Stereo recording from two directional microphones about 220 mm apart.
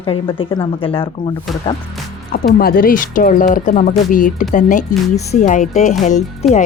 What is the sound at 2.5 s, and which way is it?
Speech, 40° left (ahead or behind).